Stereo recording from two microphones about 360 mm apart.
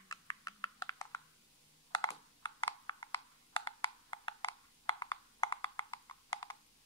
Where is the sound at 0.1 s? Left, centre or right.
Centre.